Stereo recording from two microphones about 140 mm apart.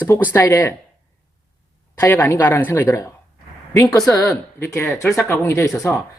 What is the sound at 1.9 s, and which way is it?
Speech, 15° left (ahead or behind).